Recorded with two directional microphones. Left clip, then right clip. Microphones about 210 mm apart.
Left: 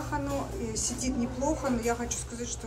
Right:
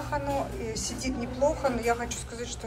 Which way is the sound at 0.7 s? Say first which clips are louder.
Left 1 dB; 15° left (ahead or behind).